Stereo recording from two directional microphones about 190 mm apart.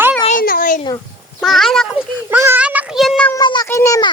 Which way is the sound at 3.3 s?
20° left (ahead or behind).